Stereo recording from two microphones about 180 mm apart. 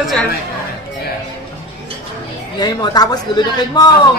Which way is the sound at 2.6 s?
20° left (ahead or behind).